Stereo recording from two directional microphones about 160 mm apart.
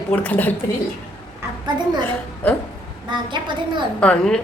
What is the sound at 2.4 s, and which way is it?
Speech, 10° left (ahead or behind).